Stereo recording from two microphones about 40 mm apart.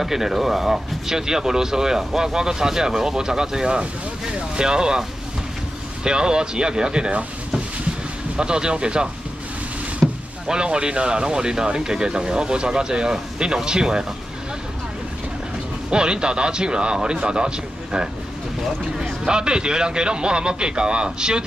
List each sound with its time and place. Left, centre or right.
0.0 s speech: centre
6.0 s speech: centre
8.4 s speech: right
15.9 s speech: right
19.2 s speech: right